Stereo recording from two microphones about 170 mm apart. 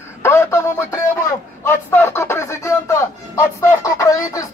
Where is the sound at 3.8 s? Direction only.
20° left (ahead or behind).